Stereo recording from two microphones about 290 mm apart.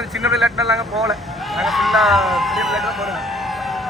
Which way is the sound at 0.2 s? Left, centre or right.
Centre.